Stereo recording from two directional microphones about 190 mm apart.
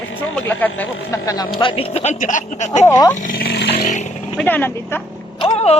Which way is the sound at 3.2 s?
50° left (ahead or behind).